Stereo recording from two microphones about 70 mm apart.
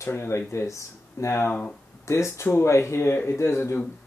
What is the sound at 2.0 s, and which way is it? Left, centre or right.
Speech, left.